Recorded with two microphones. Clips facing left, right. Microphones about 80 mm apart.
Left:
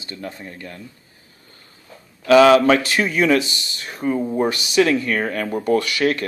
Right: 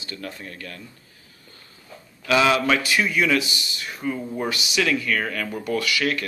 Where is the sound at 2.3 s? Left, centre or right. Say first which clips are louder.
Left 8 dB; left.